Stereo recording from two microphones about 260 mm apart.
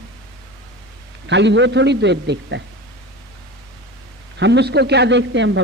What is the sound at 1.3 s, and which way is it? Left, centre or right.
A man's voice, right.